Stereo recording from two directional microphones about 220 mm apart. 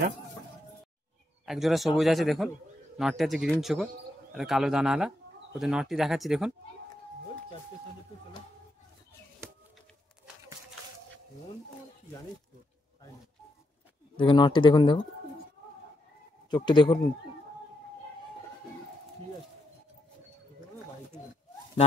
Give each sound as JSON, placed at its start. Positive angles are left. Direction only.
{"t": 1.4, "sound": "a man's voice", "side_deg": 0}
{"t": 14.1, "sound": "speech", "side_deg": 20}
{"t": 16.4, "sound": "speech", "side_deg": 20}